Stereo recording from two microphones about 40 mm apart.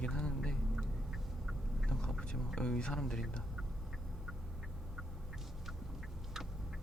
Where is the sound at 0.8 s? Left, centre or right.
Centre.